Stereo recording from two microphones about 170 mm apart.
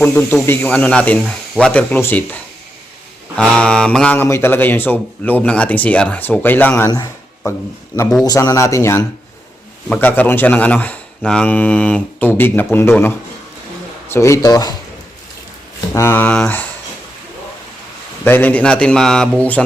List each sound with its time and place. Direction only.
0.0 s speech: 10° left (ahead or behind)
16.0 s speech: 10° left (ahead or behind)
18.3 s speech: 10° left (ahead or behind)